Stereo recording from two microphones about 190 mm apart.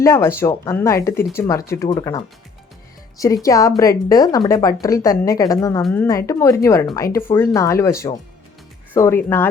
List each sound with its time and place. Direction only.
0.0 s a woman's voice: 15° left (ahead or behind)
3.4 s a woman's voice: 15° left (ahead or behind)